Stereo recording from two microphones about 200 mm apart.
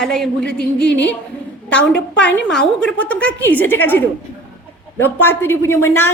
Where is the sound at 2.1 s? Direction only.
5° left (ahead or behind).